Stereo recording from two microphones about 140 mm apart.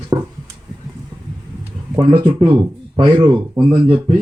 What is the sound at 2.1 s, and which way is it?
Speech, 35° right (ahead or behind).